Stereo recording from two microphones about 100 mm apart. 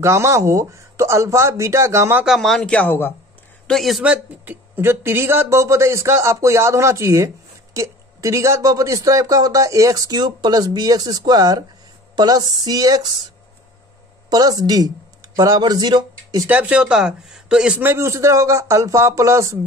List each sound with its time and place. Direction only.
0.0 s speech: 30° right (ahead or behind)
2.2 s speech: centre (ahead or behind); by 3.1 s 15° left (ahead or behind)
3.6 s speech: centre (ahead or behind)
4.0 s speech: 10° right (ahead or behind)
4.7 s a man's voice: 25° right (ahead or behind); by 13.1 s 40° right (ahead or behind)
14.3 s speech: 40° right (ahead or behind)
16.4 s speech: 15° right (ahead or behind)
17.7 s speech: 25° right (ahead or behind)